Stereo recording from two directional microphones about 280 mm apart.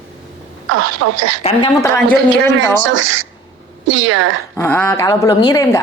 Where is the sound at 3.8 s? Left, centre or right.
Right.